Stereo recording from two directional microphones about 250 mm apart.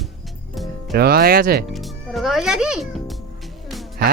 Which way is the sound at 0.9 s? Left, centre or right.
Right.